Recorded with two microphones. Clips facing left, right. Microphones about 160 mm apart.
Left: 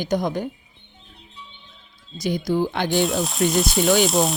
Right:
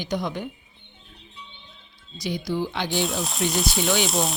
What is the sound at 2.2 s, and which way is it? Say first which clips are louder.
Speech: left 5 dB; 50° left (ahead or behind).